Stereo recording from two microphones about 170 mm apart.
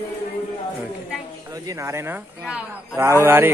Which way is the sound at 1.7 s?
15° right (ahead or behind).